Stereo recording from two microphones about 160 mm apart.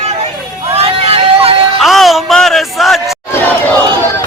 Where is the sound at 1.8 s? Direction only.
Centre (ahead or behind).